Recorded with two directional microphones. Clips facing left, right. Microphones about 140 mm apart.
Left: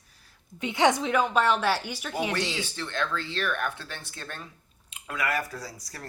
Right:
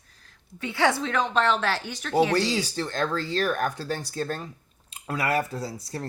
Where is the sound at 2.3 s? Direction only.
35° right (ahead or behind).